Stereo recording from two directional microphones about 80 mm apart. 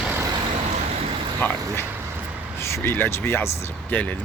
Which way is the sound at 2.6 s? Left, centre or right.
Left.